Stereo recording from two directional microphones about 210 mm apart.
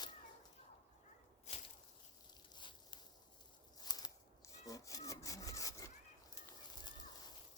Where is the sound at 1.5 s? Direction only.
30° left (ahead or behind).